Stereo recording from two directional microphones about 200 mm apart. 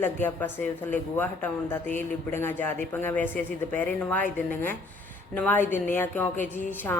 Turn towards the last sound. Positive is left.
turn(degrees=10)  # may be behind; listen again after turning